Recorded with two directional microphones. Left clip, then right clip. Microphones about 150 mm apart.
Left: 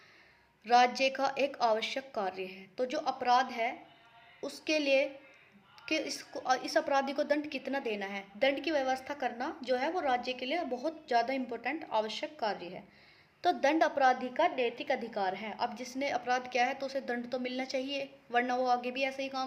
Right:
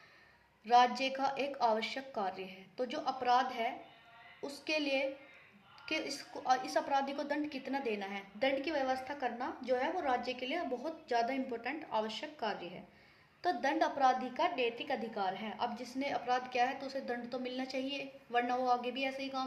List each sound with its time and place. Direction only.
0.6 s a woman's voice: 45° left (ahead or behind)